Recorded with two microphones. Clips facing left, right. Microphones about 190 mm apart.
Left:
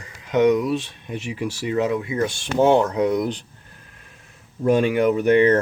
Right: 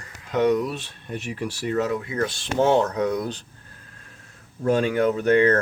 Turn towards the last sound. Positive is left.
turn(degrees=15)  # may be behind; listen again after turning